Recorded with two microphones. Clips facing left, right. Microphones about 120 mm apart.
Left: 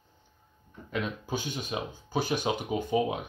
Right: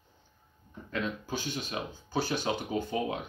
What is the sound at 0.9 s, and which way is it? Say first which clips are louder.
Speech: left 1 dB; 15° left (ahead or behind).